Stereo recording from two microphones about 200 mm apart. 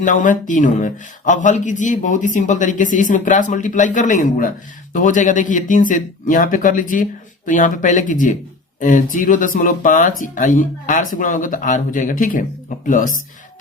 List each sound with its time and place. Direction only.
0.0 s speech: 40° left (ahead or behind)